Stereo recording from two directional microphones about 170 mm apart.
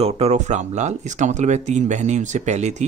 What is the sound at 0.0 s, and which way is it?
Speech, 40° right (ahead or behind).